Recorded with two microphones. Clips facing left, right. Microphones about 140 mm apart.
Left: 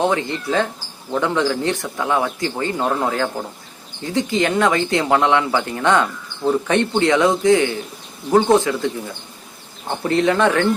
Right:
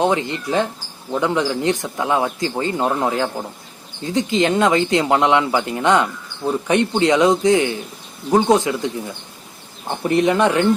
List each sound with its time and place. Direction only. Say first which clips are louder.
0.0 s speech: right 1 dB; 20° right (ahead or behind)
10.1 s speech: right 1 dB; 15° right (ahead or behind)